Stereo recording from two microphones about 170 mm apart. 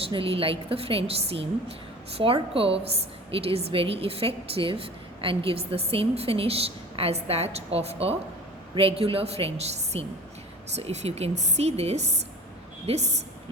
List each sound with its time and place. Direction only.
0.0 s a woman's voice: 30° right (ahead or behind)